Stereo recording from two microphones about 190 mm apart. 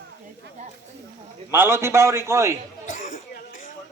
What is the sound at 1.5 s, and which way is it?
A man's voice, 10° right (ahead or behind).